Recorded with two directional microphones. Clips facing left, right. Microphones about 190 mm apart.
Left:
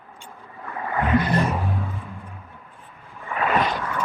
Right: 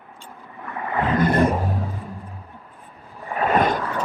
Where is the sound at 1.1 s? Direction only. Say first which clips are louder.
Right 4 dB; 50° right (ahead or behind).